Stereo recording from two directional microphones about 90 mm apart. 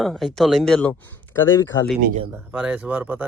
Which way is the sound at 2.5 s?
15° right (ahead or behind).